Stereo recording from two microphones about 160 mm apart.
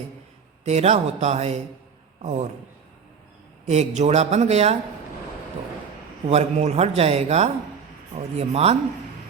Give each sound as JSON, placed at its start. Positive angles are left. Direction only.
{"t": 0.6, "sound": "speech", "side_deg": -45}
{"t": 3.7, "sound": "speech", "side_deg": -45}
{"t": 6.2, "sound": "a man's voice", "side_deg": -40}